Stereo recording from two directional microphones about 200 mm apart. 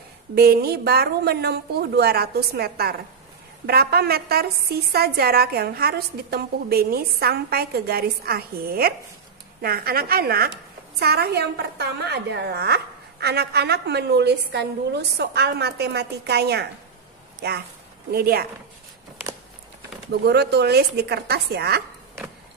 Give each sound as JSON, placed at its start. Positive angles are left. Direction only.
{"t": 0.3, "sound": "a woman's voice", "side_deg": -50}
{"t": 20.2, "sound": "a woman's voice", "side_deg": -55}